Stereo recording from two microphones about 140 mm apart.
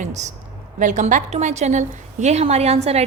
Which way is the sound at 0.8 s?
60° right (ahead or behind).